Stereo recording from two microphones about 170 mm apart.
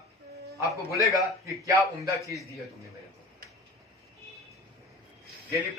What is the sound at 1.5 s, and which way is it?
Speech, 20° right (ahead or behind).